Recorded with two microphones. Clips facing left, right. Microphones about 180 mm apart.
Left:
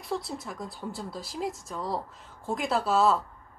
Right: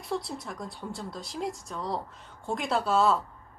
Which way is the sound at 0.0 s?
Centre (ahead or behind).